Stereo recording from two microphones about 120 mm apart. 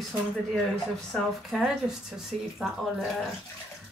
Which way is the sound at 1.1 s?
Centre (ahead or behind).